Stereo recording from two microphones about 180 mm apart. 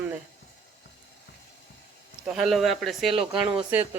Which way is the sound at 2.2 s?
Centre (ahead or behind).